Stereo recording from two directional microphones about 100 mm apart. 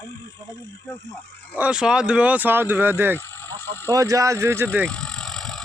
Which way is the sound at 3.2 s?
20° left (ahead or behind).